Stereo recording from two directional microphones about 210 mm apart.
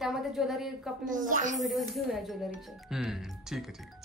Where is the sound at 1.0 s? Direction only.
40° right (ahead or behind).